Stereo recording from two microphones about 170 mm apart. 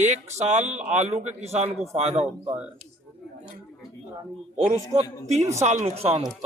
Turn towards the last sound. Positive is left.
turn(degrees=-35)  # may be behind; listen again after turning